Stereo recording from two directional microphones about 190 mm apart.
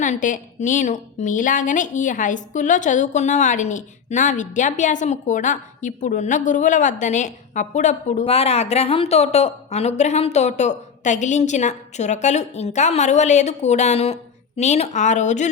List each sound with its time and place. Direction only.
0.0 s a woman's voice: 40° left (ahead or behind)